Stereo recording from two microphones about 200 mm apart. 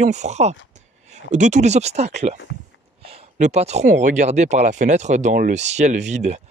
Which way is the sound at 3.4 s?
35° right (ahead or behind).